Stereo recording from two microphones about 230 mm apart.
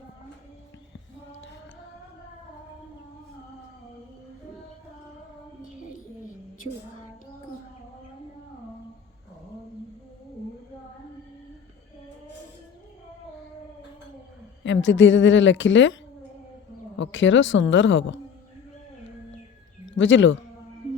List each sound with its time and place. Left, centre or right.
14.6 s a woman's voice: left
17.0 s a woman's voice: left
19.8 s speech: left